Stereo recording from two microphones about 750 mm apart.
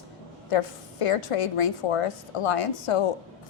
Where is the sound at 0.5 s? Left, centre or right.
Left.